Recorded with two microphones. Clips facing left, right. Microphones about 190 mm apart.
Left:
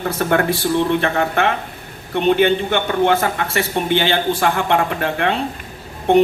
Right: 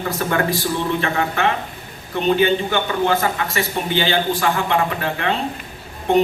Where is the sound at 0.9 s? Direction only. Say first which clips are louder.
Left 3 dB; 55° left (ahead or behind).